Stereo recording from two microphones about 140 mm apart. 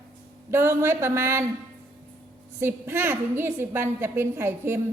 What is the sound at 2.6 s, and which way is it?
A woman's voice, 15° right (ahead or behind).